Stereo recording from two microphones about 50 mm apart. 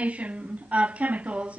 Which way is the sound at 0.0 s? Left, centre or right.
Right.